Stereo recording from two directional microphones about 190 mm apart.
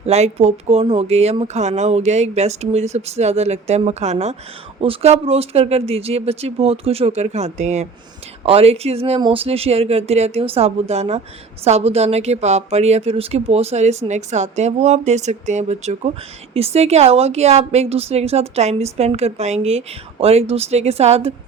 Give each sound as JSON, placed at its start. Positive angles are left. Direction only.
{"t": 0.0, "sound": "speech", "side_deg": -35}